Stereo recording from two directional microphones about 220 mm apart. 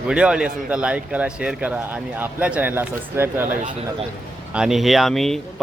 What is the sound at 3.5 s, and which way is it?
Speech, 35° right (ahead or behind).